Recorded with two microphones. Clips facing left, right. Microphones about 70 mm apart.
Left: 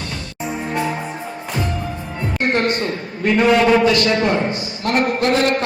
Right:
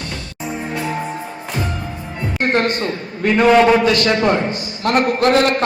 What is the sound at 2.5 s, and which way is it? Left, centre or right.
A man's voice, right.